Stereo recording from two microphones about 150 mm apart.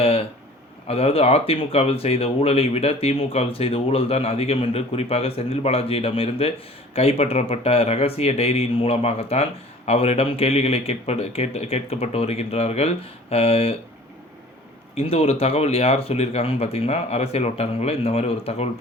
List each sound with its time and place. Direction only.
0.0 s a sound: 40° left (ahead or behind)
0.9 s speech: 40° left (ahead or behind)
14.9 s speech: 40° left (ahead or behind)